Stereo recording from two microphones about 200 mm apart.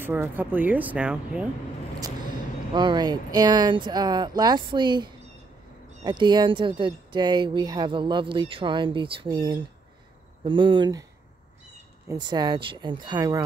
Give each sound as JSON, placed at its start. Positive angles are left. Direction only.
{"t": 0.0, "sound": "speech", "side_deg": -10}
{"t": 2.7, "sound": "speech", "side_deg": -25}
{"t": 12.1, "sound": "speech", "side_deg": -20}